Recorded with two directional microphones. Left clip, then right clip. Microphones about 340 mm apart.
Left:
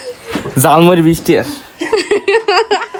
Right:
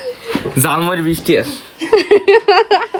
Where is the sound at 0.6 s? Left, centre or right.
Left.